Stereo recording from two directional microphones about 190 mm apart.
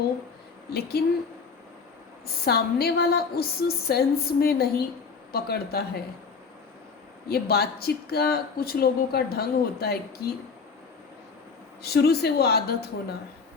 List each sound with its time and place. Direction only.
1.0 s speech: 55° left (ahead or behind)
2.2 s a woman's voice: 55° left (ahead or behind)
7.3 s speech: 55° left (ahead or behind)
11.8 s speech: 55° left (ahead or behind)